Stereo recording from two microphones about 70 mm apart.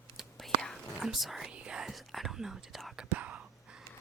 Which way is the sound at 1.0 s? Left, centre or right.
Centre.